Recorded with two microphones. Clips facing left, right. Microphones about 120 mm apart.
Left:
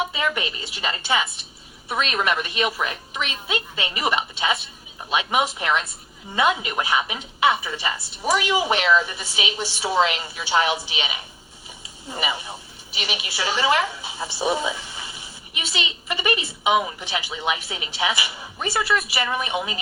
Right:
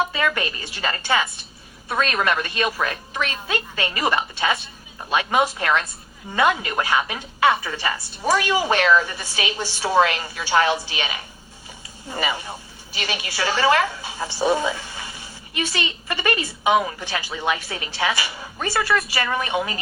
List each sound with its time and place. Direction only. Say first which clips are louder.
0.1 s a woman's voice: right 2 dB; 15° left (ahead or behind)